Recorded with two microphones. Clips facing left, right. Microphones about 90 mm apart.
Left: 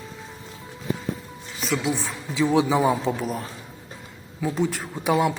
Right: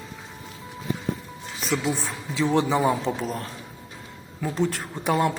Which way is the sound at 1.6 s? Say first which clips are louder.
Left 1 dB; centre (ahead or behind).